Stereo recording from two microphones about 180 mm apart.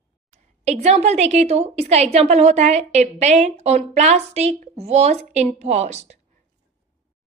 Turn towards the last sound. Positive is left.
turn(degrees=-40)  # may be behind; listen again after turning